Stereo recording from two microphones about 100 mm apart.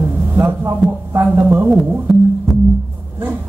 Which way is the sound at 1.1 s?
20° right (ahead or behind).